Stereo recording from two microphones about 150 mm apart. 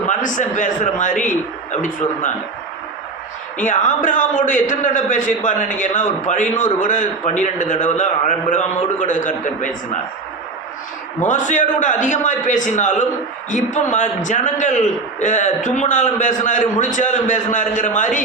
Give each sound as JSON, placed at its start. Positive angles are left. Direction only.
{"t": 0.1, "sound": "a man's voice", "side_deg": 55}
{"t": 3.6, "sound": "a man's voice", "side_deg": 60}
{"t": 11.2, "sound": "a man's voice", "side_deg": 55}